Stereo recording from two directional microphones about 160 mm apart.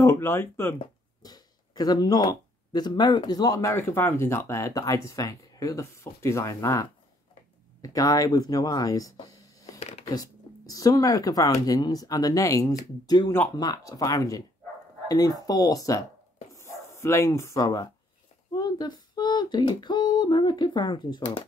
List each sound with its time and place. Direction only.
0.0 s speech: 15° left (ahead or behind)
9.8 s a sound: 45° left (ahead or behind)
10.0 s speech: 25° left (ahead or behind)